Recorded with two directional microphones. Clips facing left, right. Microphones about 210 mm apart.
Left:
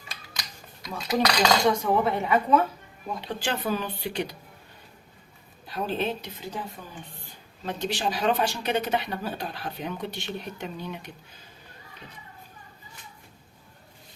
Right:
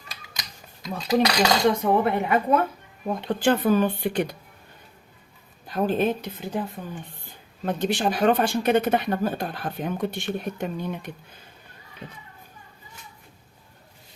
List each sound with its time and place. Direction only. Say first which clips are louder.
0.3 s cutlery: even; 20° right (ahead or behind)
1.8 s a woman's voice: right 3 dB; 55° right (ahead or behind)
5.6 s speech: right 6 dB; 50° right (ahead or behind)
7.6 s speech: right 5 dB; 55° right (ahead or behind)